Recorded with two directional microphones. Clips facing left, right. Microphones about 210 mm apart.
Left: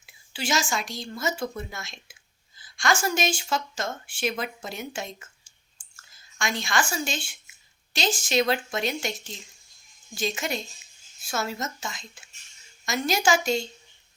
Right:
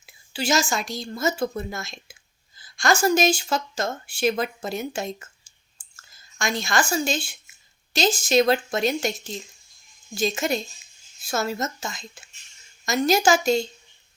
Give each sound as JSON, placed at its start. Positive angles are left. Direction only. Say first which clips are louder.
{"t": 0.0, "sound": "speech", "louder": "right 5 dB", "side_deg": -40}
{"t": 6.4, "sound": "speech", "louder": "right 3 dB", "side_deg": -40}